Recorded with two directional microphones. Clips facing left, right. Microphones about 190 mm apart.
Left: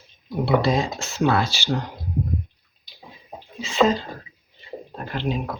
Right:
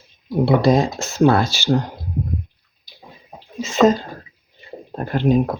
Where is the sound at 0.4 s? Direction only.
45° right (ahead or behind).